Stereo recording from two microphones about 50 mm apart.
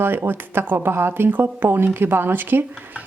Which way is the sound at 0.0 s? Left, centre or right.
Right.